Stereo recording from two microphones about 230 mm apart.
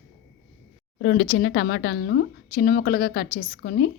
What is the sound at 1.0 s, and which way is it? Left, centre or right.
Speech, left.